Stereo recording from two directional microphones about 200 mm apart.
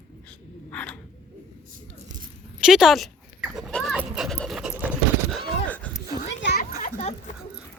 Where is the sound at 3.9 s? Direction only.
5° right (ahead or behind).